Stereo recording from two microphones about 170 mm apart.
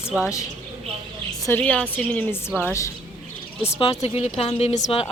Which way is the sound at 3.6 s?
35° left (ahead or behind).